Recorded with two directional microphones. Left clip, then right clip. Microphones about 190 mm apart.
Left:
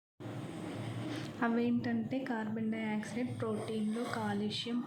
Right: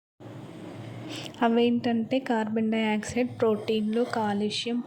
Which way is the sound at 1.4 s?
40° right (ahead or behind).